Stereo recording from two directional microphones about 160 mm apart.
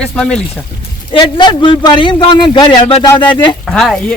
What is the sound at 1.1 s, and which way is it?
A man's voice, 30° left (ahead or behind).